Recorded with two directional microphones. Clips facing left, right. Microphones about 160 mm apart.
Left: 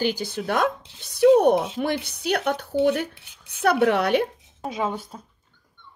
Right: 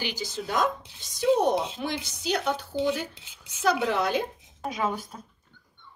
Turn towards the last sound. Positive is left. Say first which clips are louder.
# left 2 dB
turn(degrees=25)  # may be behind; listen again after turning